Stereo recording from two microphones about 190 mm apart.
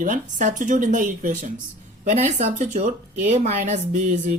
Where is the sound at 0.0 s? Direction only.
40° right (ahead or behind).